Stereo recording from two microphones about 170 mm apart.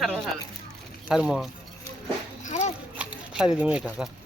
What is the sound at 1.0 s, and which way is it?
Speech, 5° right (ahead or behind).